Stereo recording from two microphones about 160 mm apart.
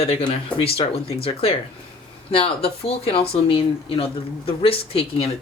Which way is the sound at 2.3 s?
35° left (ahead or behind).